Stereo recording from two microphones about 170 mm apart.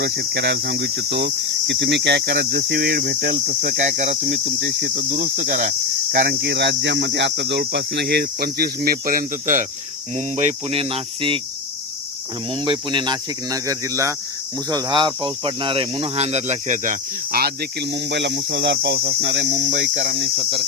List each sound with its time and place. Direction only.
0.2 s speech: 75° right (ahead or behind)
3.8 s speech: 45° right (ahead or behind)
5.1 s cricket: 70° right (ahead or behind)
6.2 s speech: 90° right; by 11.3 s 30° right (ahead or behind)
12.5 s speech: 30° right (ahead or behind); by 19.5 s 85° right
19.9 s speech: 45° right (ahead or behind)